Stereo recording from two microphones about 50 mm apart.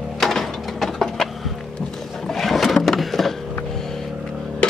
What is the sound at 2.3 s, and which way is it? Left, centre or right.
Sewing machine, centre.